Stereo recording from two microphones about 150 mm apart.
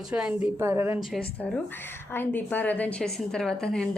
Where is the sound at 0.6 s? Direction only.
15° right (ahead or behind).